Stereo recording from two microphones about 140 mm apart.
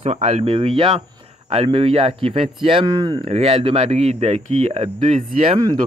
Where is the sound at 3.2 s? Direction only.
45° right (ahead or behind).